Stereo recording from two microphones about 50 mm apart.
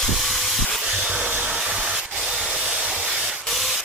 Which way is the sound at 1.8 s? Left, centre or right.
Right.